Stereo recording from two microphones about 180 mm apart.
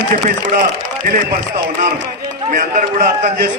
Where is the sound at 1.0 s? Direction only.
50° right (ahead or behind).